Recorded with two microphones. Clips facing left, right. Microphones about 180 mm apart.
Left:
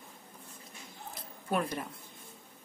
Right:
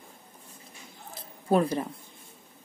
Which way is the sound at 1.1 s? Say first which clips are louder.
Right 8 dB; 35° right (ahead or behind).